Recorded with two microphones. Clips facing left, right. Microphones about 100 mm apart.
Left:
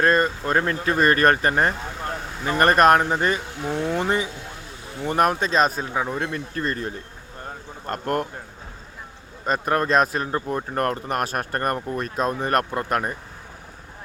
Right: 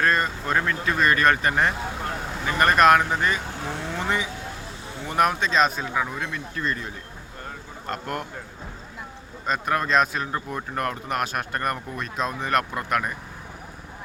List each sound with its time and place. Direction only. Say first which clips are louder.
0.0 s speech: left 4 dB; 40° left (ahead or behind)
6.1 s speech: left 4 dB; 45° left (ahead or behind)
7.4 s a sound: left 2 dB; 40° left (ahead or behind)
9.5 s speech: left 2 dB; 40° left (ahead or behind)